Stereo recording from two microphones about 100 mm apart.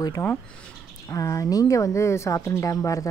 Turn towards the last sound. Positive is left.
turn(degrees=35)  # may be behind; listen again after turning